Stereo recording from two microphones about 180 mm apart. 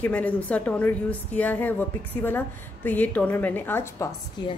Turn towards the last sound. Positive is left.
turn(degrees=15)  # may be behind; listen again after turning